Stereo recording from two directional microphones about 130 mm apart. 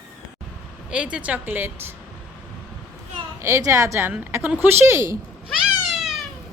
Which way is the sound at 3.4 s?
20° right (ahead or behind).